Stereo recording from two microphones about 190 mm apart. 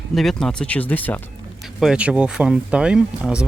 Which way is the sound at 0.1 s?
Centre (ahead or behind).